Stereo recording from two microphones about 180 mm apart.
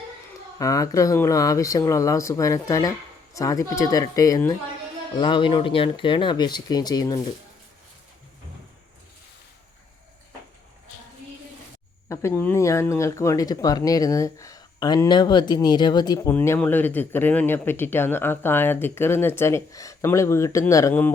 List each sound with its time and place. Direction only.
0.6 s speech: 20° left (ahead or behind)
12.0 s speech: 15° left (ahead or behind)